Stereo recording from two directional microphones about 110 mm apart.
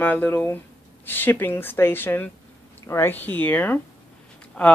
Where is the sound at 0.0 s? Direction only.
15° left (ahead or behind).